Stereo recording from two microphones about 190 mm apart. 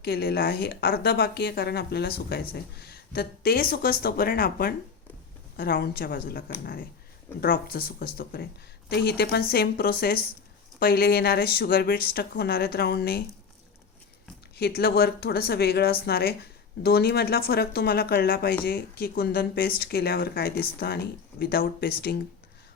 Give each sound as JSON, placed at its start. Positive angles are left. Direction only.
{"t": 0.0, "sound": "a woman's voice", "side_deg": 55}
{"t": 7.4, "sound": "a woman's voice", "side_deg": 50}
{"t": 14.5, "sound": "a woman's voice", "side_deg": 55}